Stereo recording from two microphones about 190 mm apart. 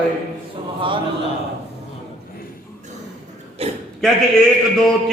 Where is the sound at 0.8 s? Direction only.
25° right (ahead or behind).